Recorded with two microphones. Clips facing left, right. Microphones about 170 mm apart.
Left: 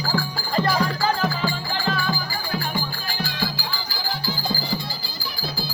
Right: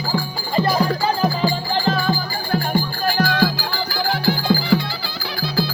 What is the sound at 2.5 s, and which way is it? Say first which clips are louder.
Music: right 8 dB; 55° right (ahead or behind).